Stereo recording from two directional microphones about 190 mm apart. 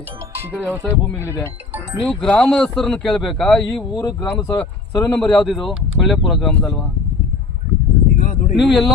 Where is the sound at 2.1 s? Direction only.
5° left (ahead or behind).